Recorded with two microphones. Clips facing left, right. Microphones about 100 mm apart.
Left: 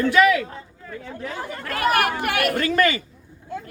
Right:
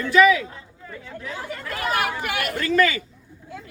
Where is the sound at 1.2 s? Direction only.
60° left (ahead or behind).